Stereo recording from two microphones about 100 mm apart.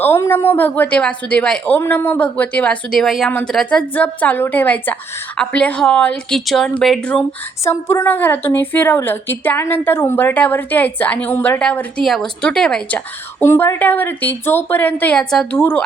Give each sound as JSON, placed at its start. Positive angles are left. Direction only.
{"t": 0.0, "sound": "a woman's voice", "side_deg": 25}
{"t": 7.6, "sound": "a woman's voice", "side_deg": 30}
{"t": 13.4, "sound": "a woman's voice", "side_deg": 25}
{"t": 15.5, "sound": "a woman's voice", "side_deg": 20}